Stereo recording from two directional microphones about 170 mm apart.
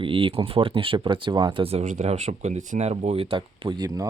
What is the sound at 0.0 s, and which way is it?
Speech, 30° right (ahead or behind).